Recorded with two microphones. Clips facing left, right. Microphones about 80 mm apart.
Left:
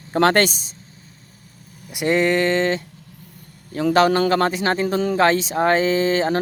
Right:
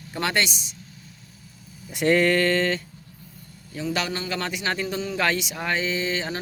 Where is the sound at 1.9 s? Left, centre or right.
Centre.